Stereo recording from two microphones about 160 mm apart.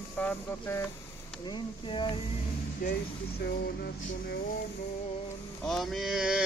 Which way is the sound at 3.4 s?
80° left.